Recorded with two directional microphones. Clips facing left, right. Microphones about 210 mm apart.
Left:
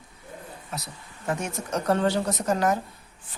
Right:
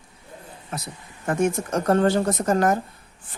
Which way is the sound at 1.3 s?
50° right (ahead or behind).